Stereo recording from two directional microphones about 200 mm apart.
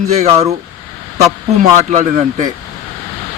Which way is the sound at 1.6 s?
40° right (ahead or behind).